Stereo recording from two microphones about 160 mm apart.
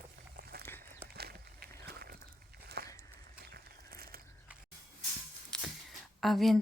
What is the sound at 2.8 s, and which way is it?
Walk, 85° right.